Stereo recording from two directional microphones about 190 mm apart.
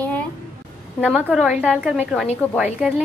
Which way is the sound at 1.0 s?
5° right (ahead or behind).